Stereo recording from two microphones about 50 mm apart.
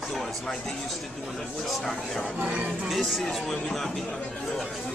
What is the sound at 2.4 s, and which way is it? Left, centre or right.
Speech, right.